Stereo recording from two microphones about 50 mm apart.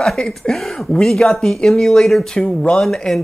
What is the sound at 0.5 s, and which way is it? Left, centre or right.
Speech, centre.